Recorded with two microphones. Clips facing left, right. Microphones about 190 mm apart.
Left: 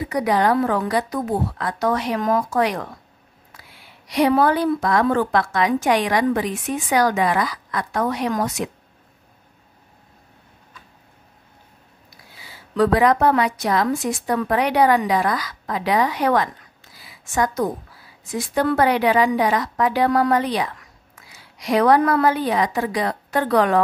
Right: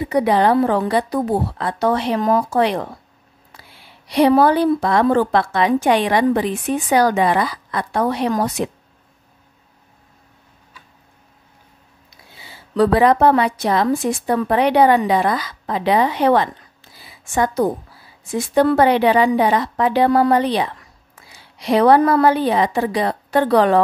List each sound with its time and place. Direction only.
0.0 s a woman's voice: 30° right (ahead or behind)
4.1 s a woman's voice: 30° right (ahead or behind)
12.4 s a woman's voice: 30° right (ahead or behind)